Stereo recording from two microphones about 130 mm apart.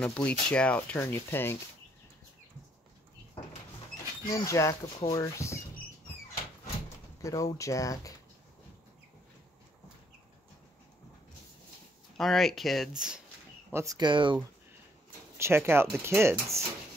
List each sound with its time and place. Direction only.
0.0 s speech: 10° left (ahead or behind)
0.9 s speech: 20° left (ahead or behind)
4.5 s speech: 25° left (ahead or behind)
7.2 s speech: 25° left (ahead or behind)
12.2 s speech: centre (ahead or behind)
13.7 s speech: 30° right (ahead or behind)
15.3 s speech: 20° right (ahead or behind)